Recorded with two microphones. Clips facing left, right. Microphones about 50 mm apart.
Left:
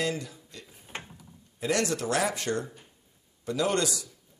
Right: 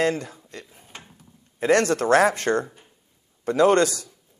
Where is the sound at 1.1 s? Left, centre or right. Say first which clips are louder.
Left 1 dB; right.